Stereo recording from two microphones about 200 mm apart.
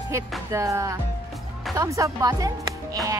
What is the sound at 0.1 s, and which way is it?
A woman's voice, 15° right (ahead or behind).